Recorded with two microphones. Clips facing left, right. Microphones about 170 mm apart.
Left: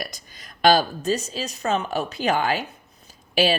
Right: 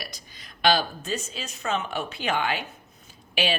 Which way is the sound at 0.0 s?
45° left (ahead or behind).